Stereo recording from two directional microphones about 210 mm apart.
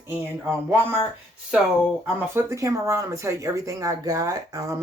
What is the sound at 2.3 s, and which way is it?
Speech, 15° right (ahead or behind).